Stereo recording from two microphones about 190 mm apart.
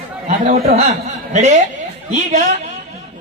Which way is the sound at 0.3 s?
35° right (ahead or behind).